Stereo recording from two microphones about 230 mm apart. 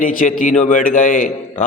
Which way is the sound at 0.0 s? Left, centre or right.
Left.